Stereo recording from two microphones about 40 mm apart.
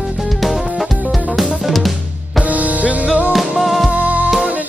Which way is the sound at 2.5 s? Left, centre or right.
Right.